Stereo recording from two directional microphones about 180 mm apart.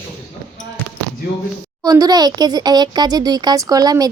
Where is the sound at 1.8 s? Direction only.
20° right (ahead or behind).